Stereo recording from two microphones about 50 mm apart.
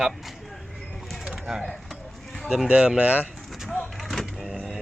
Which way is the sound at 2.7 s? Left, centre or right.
Right.